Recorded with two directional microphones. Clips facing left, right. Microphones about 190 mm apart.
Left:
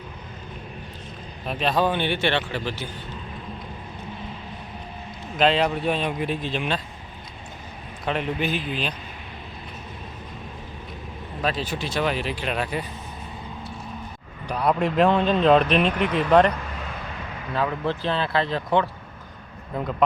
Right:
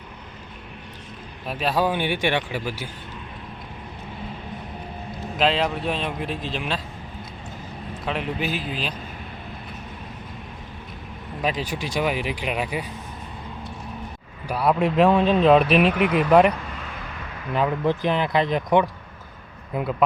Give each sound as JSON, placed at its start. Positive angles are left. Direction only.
{"t": 1.5, "sound": "speech", "side_deg": -5}
{"t": 5.4, "sound": "speech", "side_deg": 0}
{"t": 8.0, "sound": "speech", "side_deg": 0}
{"t": 11.4, "sound": "speech", "side_deg": -15}
{"t": 14.4, "sound": "speech", "side_deg": -5}
{"t": 17.5, "sound": "speech", "side_deg": -15}